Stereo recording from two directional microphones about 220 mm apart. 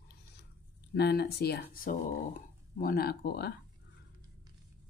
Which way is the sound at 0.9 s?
45° left (ahead or behind).